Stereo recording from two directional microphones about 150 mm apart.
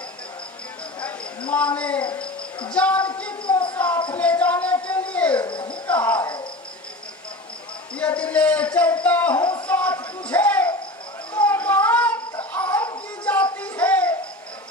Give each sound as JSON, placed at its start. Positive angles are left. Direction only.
{"t": 1.5, "sound": "speech", "side_deg": 10}
{"t": 2.7, "sound": "music", "side_deg": 10}
{"t": 3.4, "sound": "a sound", "side_deg": 35}
{"t": 3.7, "sound": "a sound", "side_deg": 10}
{"t": 5.5, "sound": "music", "side_deg": 30}
{"t": 5.9, "sound": "music", "side_deg": 10}
{"t": 6.1, "sound": "a sound", "side_deg": 30}
{"t": 7.9, "sound": "a man's voice", "side_deg": 10}
{"t": 9.4, "sound": "a sound", "side_deg": 30}
{"t": 9.7, "sound": "music", "side_deg": 10}
{"t": 11.3, "sound": "child singing", "side_deg": 10}
{"t": 12.5, "sound": "music", "side_deg": 10}